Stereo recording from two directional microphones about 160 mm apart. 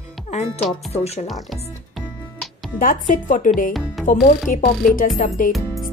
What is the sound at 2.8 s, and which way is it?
Speech, 55° left (ahead or behind).